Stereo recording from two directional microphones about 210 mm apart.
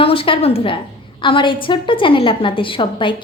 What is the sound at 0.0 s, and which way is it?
A woman's voice, 25° left (ahead or behind).